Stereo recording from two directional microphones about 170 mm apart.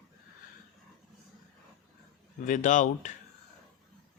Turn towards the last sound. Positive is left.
turn(degrees=45)  # may be behind; listen again after turning